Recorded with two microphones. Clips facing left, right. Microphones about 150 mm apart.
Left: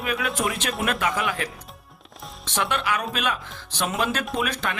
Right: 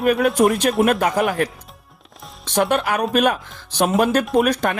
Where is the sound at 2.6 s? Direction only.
45° right (ahead or behind).